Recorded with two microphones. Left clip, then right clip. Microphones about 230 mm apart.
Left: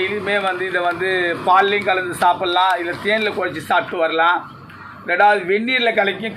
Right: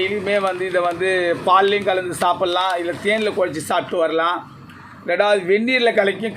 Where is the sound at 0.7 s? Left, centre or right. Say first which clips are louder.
Right 2 dB; right.